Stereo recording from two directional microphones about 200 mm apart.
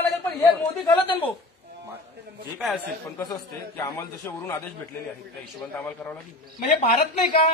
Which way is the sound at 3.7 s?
15° left (ahead or behind).